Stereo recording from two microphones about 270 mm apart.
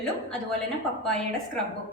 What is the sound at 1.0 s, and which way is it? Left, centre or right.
Speech, centre.